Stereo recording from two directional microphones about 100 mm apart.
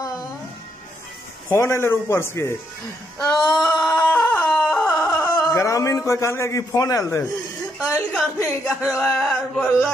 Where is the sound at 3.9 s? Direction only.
5° left (ahead or behind).